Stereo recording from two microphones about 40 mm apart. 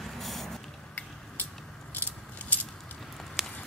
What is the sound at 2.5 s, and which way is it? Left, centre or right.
Keys jangling, left.